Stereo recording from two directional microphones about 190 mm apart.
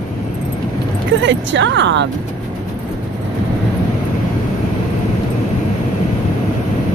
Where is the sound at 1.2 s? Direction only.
70° right (ahead or behind).